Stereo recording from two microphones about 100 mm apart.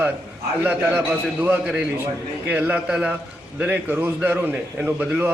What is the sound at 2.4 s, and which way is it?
A man's voice, 10° right (ahead or behind).